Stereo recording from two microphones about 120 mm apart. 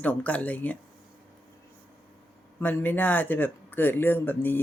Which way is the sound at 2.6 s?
15° left (ahead or behind).